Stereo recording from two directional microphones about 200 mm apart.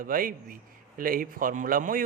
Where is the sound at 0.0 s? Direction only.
45° right (ahead or behind).